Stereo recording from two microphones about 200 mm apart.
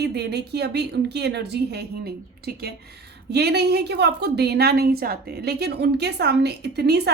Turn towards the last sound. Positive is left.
turn(degrees=-55)  # may be behind; listen again after turning